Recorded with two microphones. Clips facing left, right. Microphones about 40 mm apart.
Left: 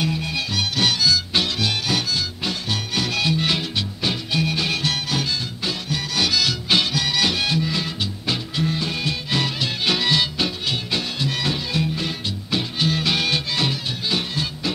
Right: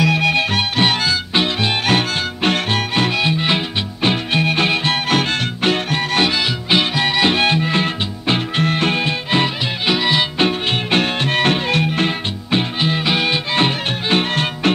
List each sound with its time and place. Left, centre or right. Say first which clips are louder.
0.1 s music: right 10 dB; right
0.4 s music: right 6 dB; right
1.9 s music: right 6 dB; right
2.9 s music: right 2 dB; right
5.1 s music: right 7 dB; right
9.0 s music: right 6 dB; right
9.8 s music: right 4 dB; right
10.4 s music: right 7 dB; right
13.6 s music: right 6 dB; right